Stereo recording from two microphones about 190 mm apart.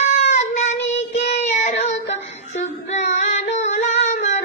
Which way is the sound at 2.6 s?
35° left (ahead or behind).